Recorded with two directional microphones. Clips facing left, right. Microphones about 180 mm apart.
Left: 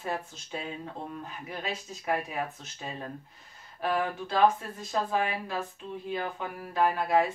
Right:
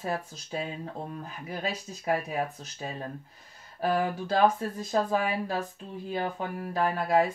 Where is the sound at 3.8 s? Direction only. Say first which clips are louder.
Right 2 dB; 40° right (ahead or behind).